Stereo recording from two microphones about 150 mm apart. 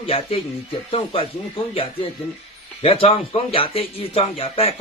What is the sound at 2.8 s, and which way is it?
Speech, 40° left (ahead or behind).